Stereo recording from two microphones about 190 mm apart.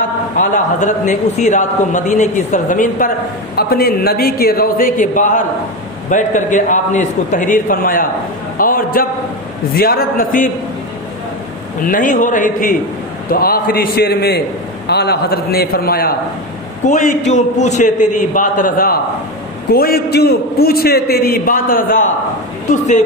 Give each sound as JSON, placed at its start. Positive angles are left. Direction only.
{"t": 0.4, "sound": "a man's voice", "side_deg": 40}
{"t": 11.8, "sound": "a man's voice", "side_deg": 45}
{"t": 16.8, "sound": "a man's voice", "side_deg": 40}